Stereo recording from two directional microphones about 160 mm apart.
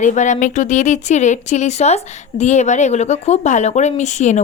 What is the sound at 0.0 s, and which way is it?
Speech, 50° left (ahead or behind).